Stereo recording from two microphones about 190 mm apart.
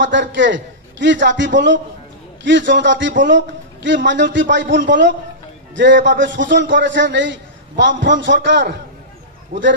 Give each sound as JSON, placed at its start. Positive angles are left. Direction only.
{"t": 0.0, "sound": "a man's voice", "side_deg": -70}